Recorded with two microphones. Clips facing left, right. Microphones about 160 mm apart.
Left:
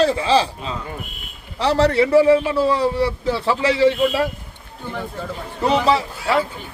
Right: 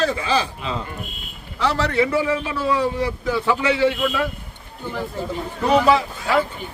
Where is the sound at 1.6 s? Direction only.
35° left (ahead or behind).